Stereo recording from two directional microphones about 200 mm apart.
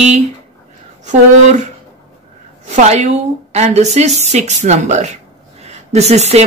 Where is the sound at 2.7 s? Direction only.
35° right (ahead or behind).